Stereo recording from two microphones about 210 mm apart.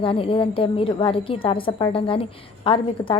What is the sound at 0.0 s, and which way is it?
A woman's voice, 25° left (ahead or behind).